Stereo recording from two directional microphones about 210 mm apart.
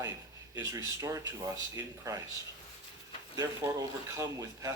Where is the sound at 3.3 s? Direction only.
15° right (ahead or behind).